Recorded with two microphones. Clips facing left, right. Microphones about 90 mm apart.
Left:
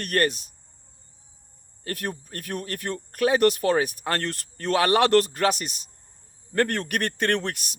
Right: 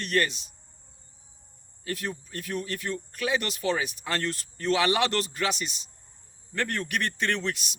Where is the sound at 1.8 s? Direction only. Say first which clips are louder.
Left 2 dB; 50° left (ahead or behind).